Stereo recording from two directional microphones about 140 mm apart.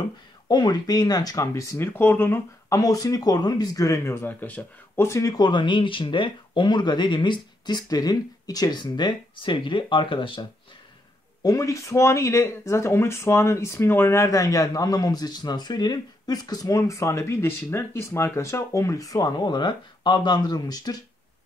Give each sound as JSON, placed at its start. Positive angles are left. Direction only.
{"t": 0.5, "sound": "speech", "side_deg": 30}
{"t": 11.4, "sound": "speech", "side_deg": 25}